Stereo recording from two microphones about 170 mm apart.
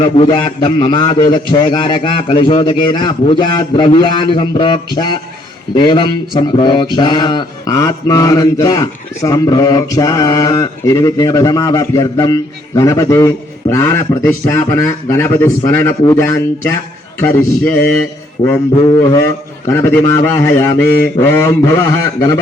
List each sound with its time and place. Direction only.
0.0 s speech: 30° left (ahead or behind)
17.2 s mantra: 10° left (ahead or behind)
18.7 s speech: 25° left (ahead or behind)
19.6 s mantra: 15° left (ahead or behind)